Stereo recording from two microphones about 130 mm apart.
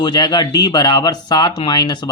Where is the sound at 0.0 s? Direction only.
35° left (ahead or behind).